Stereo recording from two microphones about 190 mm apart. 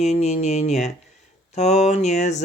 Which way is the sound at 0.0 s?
35° left (ahead or behind).